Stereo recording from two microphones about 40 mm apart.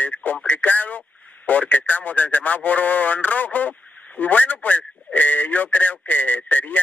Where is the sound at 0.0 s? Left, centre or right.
Left.